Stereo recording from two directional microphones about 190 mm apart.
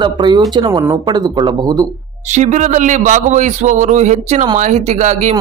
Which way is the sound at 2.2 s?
40° right (ahead or behind).